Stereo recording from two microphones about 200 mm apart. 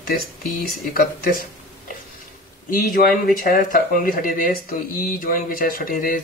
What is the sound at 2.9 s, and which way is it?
Speech, 45° left (ahead or behind).